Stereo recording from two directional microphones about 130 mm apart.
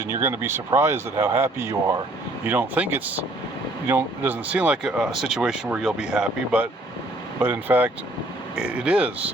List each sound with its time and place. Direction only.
0.1 s speech: 20° right (ahead or behind)